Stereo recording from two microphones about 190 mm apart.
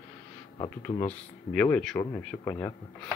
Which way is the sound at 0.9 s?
5° left (ahead or behind).